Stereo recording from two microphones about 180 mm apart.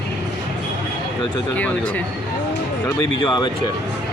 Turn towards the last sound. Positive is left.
turn(degrees=25)  # may be behind; listen again after turning